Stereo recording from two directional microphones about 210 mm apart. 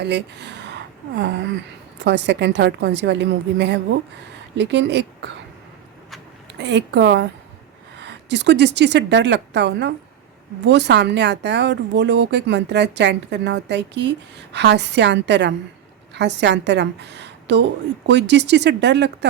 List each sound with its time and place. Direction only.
0.0 s speech: 55° right (ahead or behind)
2.0 s speech: 55° right (ahead or behind)
6.6 s a woman's voice: 55° right (ahead or behind)